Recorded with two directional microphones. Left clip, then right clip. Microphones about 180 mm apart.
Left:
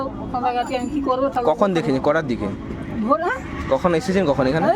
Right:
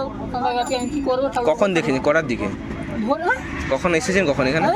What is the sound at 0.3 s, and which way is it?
Speech, 10° left (ahead or behind).